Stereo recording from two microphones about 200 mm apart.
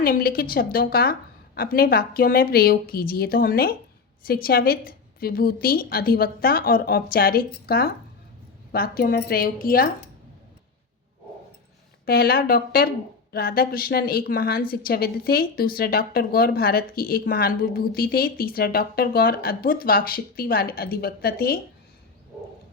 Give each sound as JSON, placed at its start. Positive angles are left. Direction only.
{"t": 0.0, "sound": "a woman's voice", "side_deg": 50}
{"t": 12.0, "sound": "a woman's voice", "side_deg": 50}